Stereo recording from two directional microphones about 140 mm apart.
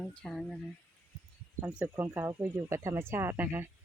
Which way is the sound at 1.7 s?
15° right (ahead or behind).